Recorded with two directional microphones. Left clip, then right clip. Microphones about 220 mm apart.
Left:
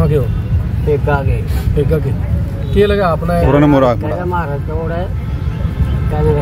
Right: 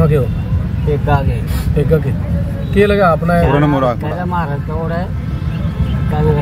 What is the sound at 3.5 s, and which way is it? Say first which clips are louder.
Speech: left 8 dB; 40° left (ahead or behind).